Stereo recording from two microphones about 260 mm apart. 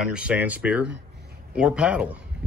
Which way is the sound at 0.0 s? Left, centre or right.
Centre.